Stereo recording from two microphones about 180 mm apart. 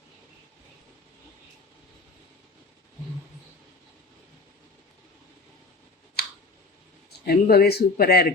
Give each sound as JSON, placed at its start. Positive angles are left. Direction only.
{"t": 7.1, "sound": "speech", "side_deg": 60}